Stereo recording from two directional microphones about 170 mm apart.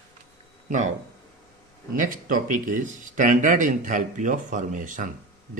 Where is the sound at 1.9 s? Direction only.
55° right (ahead or behind).